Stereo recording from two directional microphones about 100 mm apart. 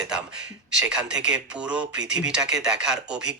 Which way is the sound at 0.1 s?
10° right (ahead or behind).